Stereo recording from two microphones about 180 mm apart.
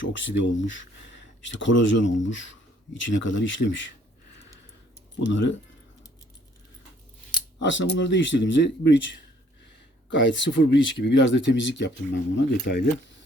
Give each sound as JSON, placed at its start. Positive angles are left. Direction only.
{"t": 0.0, "sound": "speech", "side_deg": 90}
{"t": 5.3, "sound": "speech", "side_deg": 90}
{"t": 7.6, "sound": "speech", "side_deg": 90}
{"t": 10.1, "sound": "speech", "side_deg": 90}